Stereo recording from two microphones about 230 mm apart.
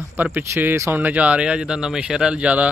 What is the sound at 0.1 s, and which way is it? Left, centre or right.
Speech, centre.